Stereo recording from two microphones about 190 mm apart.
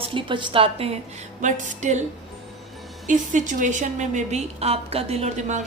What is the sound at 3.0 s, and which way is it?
A woman's voice, 40° right (ahead or behind).